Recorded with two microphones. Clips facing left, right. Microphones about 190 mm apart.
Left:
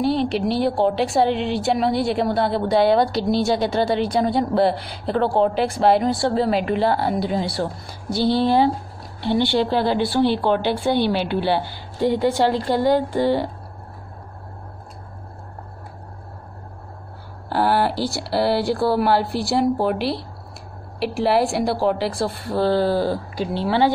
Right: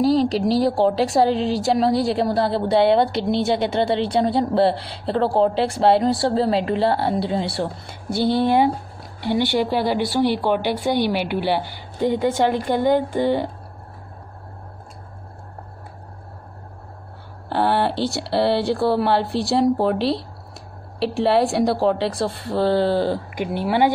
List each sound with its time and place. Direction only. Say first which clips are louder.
0.0 s a woman's voice: right 3 dB; 35° right (ahead or behind); by 13.5 s 20° right (ahead or behind)
17.5 s a woman's voice: even; 25° right (ahead or behind)